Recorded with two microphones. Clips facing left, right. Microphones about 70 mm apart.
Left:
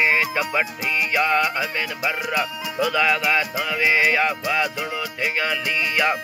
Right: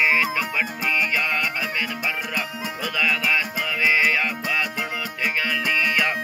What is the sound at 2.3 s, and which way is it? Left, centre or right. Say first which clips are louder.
Speech: left 4 dB; centre.